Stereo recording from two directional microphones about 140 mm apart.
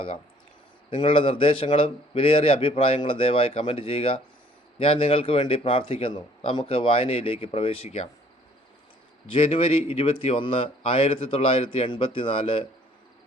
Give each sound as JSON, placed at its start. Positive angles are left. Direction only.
{"t": 0.9, "sound": "a man's voice", "side_deg": 40}
{"t": 9.3, "sound": "a man's voice", "side_deg": 40}